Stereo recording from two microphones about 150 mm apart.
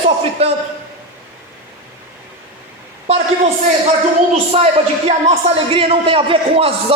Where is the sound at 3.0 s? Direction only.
40° right (ahead or behind).